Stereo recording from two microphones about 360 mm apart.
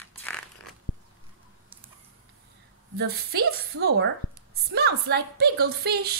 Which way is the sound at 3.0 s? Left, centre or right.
Right.